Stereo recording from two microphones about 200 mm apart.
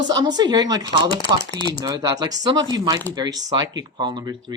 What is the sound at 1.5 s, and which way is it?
Speech, 25° left (ahead or behind).